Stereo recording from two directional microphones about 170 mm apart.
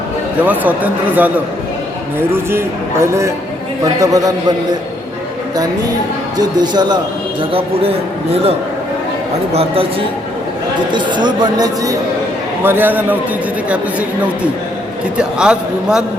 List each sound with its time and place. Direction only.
0.4 s speech: 10° right (ahead or behind)
2.3 s speech: 15° right (ahead or behind)
6.3 s a man's voice: 25° right (ahead or behind)
10.9 s speech: 25° right (ahead or behind); by 13.1 s 10° right (ahead or behind)
15.2 s a man's voice: 5° right (ahead or behind)